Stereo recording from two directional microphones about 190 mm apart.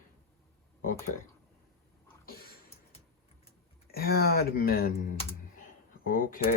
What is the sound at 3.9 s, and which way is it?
Speech, 55° left (ahead or behind).